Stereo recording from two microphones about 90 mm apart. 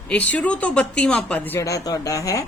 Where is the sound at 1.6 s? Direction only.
40° left (ahead or behind).